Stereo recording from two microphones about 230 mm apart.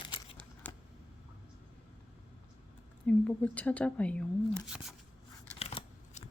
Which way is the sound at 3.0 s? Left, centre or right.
Centre.